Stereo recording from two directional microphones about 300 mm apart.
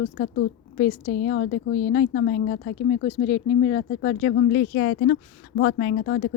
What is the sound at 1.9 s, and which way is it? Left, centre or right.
Speech, left.